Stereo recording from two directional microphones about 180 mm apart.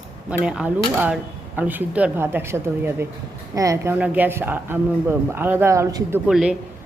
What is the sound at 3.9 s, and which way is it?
Speech, 10° right (ahead or behind).